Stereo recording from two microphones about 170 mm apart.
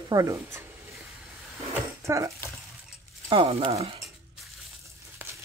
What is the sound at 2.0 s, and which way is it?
Speech, 15° right (ahead or behind).